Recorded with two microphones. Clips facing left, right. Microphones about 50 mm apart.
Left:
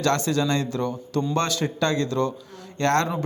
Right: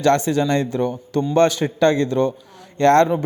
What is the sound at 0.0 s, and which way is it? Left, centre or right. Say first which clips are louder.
A man's voice: right 5 dB; right.